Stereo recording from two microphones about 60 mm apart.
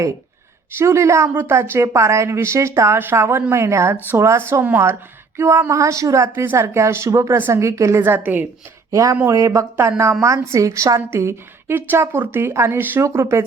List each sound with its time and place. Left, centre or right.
0.8 s a woman's voice: right
6.2 s speech: right
8.0 s speech: right
8.9 s a woman's voice: right
11.1 s speech: right
11.7 s speech: right
12.7 s speech: right
13.0 s speech: right